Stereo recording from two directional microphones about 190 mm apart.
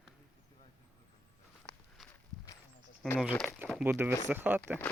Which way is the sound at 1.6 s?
15° left (ahead or behind).